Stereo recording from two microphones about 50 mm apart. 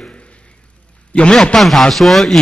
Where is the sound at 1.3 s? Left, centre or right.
Centre.